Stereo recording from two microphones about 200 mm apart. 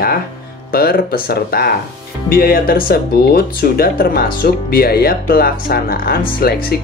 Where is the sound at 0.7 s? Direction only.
50° left (ahead or behind).